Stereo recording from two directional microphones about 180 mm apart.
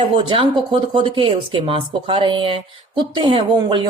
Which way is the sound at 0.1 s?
30° right (ahead or behind).